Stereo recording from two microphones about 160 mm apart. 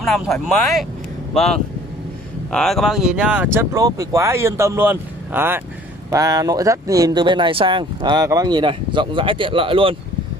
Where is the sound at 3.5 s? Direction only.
20° right (ahead or behind).